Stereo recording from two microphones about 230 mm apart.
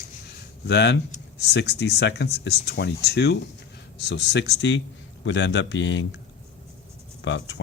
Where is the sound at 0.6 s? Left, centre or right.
Left.